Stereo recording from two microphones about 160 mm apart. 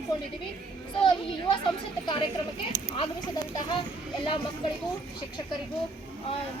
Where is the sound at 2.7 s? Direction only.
20° right (ahead or behind).